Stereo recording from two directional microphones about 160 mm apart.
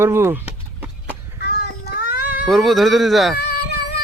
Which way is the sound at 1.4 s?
90° left.